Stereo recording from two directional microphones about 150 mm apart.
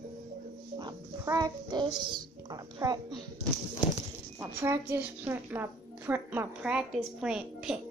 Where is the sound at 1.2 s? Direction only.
25° right (ahead or behind).